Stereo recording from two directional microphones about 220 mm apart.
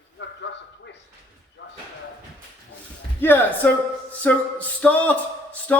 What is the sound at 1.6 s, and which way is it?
Slam, 55° left (ahead or behind).